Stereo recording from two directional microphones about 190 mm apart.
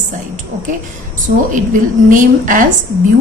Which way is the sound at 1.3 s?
50° right (ahead or behind).